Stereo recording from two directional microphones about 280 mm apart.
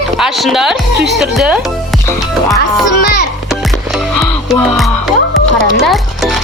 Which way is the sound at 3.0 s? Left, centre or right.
Left.